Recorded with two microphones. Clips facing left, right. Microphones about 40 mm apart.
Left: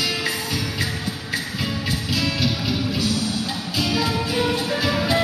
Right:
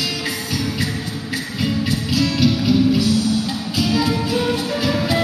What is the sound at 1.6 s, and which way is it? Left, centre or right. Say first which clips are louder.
Music: right 5 dB; centre.